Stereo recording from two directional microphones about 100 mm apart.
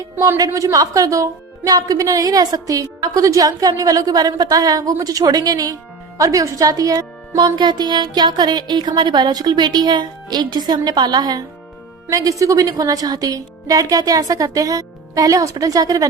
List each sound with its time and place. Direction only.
0.3 s a woman's voice: 35° right (ahead or behind)